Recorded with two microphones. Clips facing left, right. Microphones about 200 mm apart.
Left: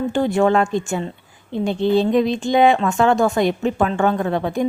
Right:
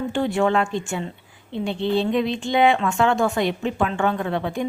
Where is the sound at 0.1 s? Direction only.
40° left (ahead or behind).